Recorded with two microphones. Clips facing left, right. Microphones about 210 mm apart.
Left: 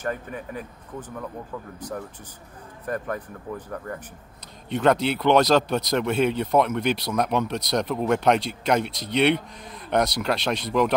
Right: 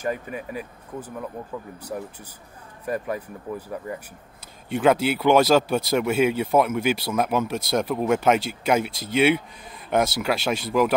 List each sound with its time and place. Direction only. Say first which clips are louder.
0.0 s speech: right 2 dB; 10° right (ahead or behind)